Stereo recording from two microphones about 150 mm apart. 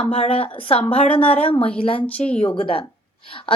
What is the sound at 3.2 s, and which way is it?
Speech, 35° left (ahead or behind).